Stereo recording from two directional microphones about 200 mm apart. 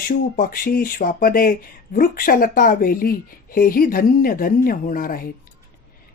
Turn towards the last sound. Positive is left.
turn(degrees=45)  # may be behind; listen again after turning